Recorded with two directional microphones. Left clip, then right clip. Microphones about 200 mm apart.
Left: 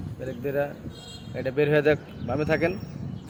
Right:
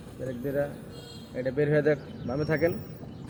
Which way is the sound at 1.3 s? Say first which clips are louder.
Left 3 dB; 50° left (ahead or behind).